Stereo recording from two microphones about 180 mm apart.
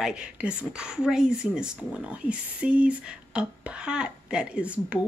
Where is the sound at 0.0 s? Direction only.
5° right (ahead or behind).